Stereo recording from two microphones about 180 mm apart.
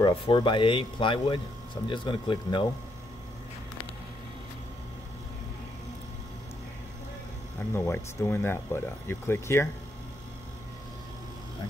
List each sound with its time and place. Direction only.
0.0 s speech: 25° left (ahead or behind)
7.7 s speech: 15° left (ahead or behind)